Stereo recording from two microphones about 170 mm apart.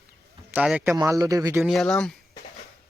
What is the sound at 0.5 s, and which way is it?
Speech, 5° right (ahead or behind).